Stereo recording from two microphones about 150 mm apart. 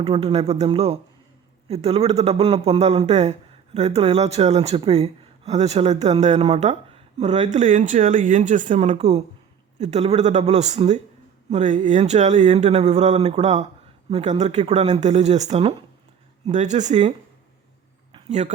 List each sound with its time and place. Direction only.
0.0 s speech: 40° right (ahead or behind)
16.5 s speech: 55° right (ahead or behind)
18.3 s speech: 50° right (ahead or behind)